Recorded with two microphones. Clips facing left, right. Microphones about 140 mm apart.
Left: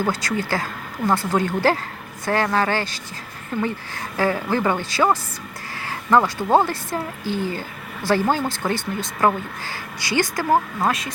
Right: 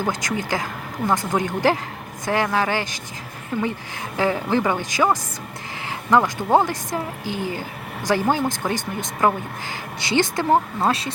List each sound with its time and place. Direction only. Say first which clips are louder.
0.0 s speech: left 1 dB; 15° right (ahead or behind)
6.1 s a woman's voice: even; 15° right (ahead or behind); by 11.1 s 30° right (ahead or behind)